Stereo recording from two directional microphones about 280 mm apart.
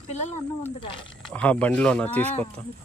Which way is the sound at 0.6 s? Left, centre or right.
Centre.